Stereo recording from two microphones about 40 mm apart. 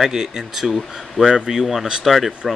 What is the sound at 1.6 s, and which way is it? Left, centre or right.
Speech, centre.